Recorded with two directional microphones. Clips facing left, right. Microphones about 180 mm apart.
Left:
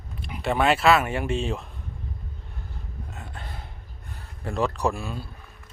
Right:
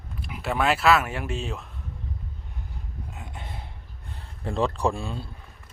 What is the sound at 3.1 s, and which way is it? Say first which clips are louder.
Gasp: even; 15° right (ahead or behind).